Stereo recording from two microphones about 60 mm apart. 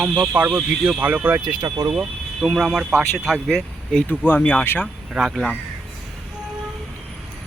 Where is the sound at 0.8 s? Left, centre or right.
Right.